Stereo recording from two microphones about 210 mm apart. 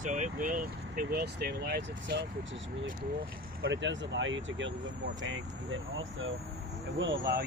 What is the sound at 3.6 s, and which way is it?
Speech, 60° right (ahead or behind).